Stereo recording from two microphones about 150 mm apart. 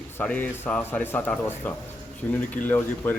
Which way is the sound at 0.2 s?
10° left (ahead or behind).